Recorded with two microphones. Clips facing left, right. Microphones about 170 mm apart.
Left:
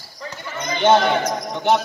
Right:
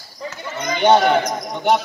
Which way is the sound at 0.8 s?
15° right (ahead or behind).